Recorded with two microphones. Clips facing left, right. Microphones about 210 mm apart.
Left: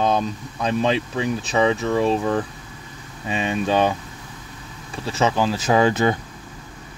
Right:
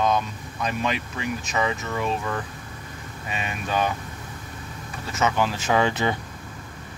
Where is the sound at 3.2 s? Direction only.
30° left (ahead or behind).